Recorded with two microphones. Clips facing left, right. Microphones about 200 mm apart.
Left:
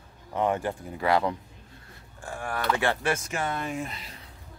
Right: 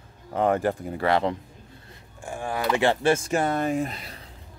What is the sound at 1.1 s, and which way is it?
Speech, 25° right (ahead or behind).